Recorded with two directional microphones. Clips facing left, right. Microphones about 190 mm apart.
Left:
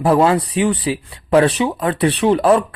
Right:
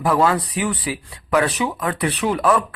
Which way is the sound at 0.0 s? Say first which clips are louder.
Left 4 dB; 30° left (ahead or behind).